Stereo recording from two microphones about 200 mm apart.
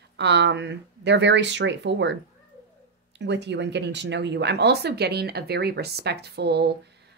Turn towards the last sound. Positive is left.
turn(degrees=-55)  # may be behind; listen again after turning